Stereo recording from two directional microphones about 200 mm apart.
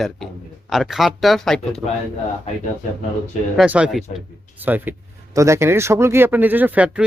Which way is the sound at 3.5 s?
5° right (ahead or behind).